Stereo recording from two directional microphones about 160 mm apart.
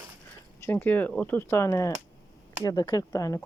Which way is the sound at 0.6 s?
15° left (ahead or behind).